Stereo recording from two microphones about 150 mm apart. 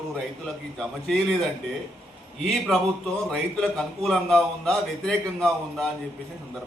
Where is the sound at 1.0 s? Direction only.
Centre (ahead or behind).